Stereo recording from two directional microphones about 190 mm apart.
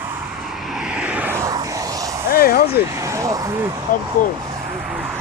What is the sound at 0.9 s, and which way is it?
Vehicle, 5° right (ahead or behind).